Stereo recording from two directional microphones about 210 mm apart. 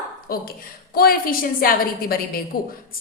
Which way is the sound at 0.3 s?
45° left (ahead or behind).